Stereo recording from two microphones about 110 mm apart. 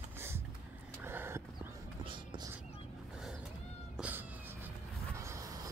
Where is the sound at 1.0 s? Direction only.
20° right (ahead or behind).